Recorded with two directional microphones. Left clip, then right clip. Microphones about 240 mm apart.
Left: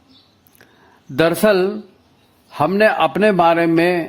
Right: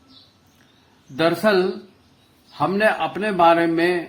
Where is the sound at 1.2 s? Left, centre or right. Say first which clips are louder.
Left 4 dB; left.